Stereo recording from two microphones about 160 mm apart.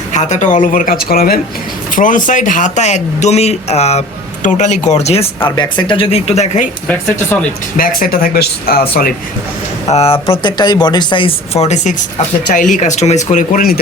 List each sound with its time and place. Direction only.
0.1 s speech: 50° left (ahead or behind); by 1.4 s 70° left (ahead or behind)
2.0 s speech: 55° left (ahead or behind)
5.5 s speech: 30° left (ahead or behind); by 6.7 s 45° left (ahead or behind)
6.8 s speech: 10° left (ahead or behind)
7.8 s speech: 60° left (ahead or behind)
9.9 s speech: 40° left (ahead or behind); by 13.7 s 60° left (ahead or behind)